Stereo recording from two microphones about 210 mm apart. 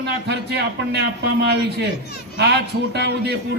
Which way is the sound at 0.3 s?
50° right (ahead or behind).